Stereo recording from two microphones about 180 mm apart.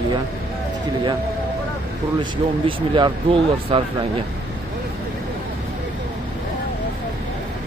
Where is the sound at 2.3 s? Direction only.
25° right (ahead or behind).